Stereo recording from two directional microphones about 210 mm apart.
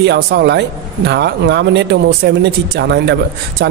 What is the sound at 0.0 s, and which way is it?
Speech, 55° right (ahead or behind).